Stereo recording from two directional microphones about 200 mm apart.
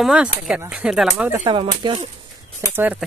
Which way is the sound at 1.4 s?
25° right (ahead or behind).